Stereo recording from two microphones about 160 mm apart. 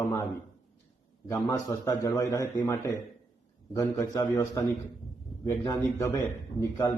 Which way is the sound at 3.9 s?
20° left (ahead or behind).